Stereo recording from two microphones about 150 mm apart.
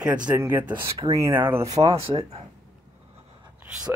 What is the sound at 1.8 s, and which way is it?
Speech, 40° right (ahead or behind).